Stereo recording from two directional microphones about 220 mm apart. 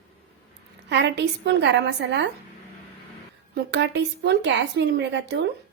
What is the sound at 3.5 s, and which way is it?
A woman's voice, 50° right (ahead or behind).